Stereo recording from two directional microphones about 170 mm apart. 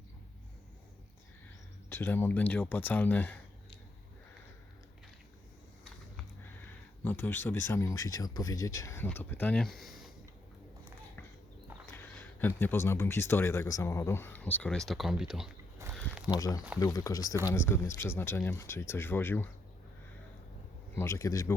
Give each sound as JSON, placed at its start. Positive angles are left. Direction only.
{"t": 1.9, "sound": "speech", "side_deg": 10}
{"t": 7.0, "sound": "speech", "side_deg": 10}
{"t": 11.9, "sound": "speech", "side_deg": 10}
{"t": 16.3, "sound": "speech", "side_deg": 20}
{"t": 20.9, "sound": "speech", "side_deg": 15}